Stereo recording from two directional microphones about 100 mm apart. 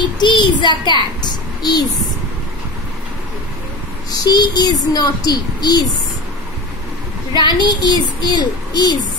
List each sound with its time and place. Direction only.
0.2 s a child's voice: 50° left (ahead or behind)
4.2 s speech: 40° left (ahead or behind)
7.3 s speech: 50° left (ahead or behind)